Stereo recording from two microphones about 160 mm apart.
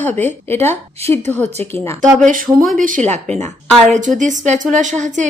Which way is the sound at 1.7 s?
15° left (ahead or behind).